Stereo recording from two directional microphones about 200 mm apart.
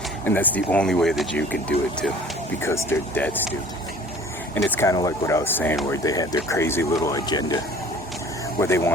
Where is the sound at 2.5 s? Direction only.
10° left (ahead or behind).